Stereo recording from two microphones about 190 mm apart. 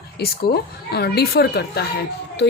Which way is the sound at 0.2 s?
55° left (ahead or behind).